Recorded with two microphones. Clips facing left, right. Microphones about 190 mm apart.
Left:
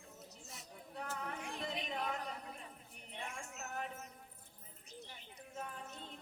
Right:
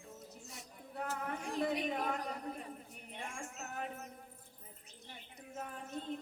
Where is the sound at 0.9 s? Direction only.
45° right (ahead or behind).